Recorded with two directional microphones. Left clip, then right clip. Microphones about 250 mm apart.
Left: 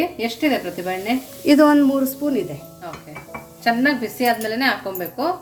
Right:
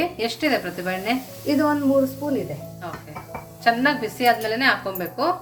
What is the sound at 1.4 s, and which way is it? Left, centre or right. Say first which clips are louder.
Speech: left 7 dB; left.